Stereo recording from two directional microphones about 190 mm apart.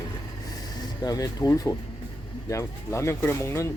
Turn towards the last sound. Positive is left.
turn(degrees=15)  # may be behind; listen again after turning